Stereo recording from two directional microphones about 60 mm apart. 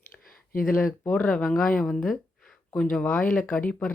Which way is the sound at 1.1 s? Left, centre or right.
Centre.